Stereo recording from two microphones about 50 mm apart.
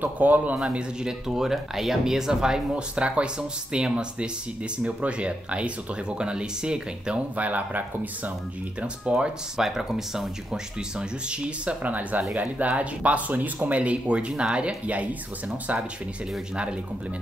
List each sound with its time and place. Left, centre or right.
0.0 s speech: right
0.6 s speech: centre
7.3 s speech: right
8.8 s speech: centre
9.6 s speech: centre
11.0 s speech: right